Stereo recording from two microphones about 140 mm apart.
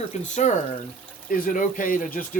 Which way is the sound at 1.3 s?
80° left.